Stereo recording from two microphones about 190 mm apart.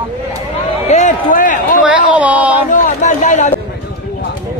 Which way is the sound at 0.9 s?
40° left (ahead or behind).